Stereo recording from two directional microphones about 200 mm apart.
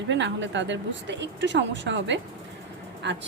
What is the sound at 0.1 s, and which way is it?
Speech, 65° right (ahead or behind).